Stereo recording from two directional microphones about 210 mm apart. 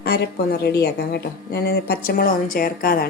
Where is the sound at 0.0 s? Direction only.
50° left (ahead or behind).